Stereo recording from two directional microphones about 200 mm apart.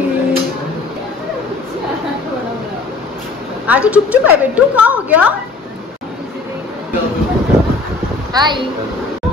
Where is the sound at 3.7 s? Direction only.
5° right (ahead or behind).